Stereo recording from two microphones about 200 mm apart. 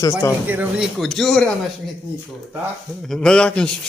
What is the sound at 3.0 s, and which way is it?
Speech, 5° left (ahead or behind).